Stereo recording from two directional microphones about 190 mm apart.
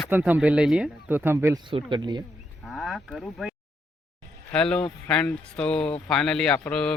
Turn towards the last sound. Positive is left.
turn(degrees=5)  # may be behind; listen again after turning